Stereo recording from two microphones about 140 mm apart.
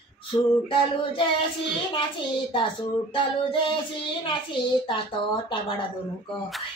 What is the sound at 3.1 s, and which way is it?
Speech, 35° left (ahead or behind).